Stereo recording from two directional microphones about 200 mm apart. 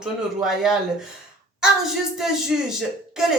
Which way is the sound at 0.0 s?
Centre (ahead or behind).